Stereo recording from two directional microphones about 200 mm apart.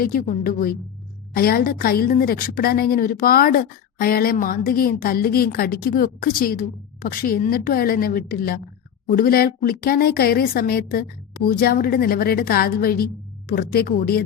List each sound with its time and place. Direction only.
0.0 s a woman's voice: 45° left (ahead or behind)